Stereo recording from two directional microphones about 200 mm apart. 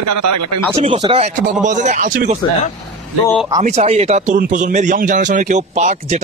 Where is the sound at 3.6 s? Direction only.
35° right (ahead or behind).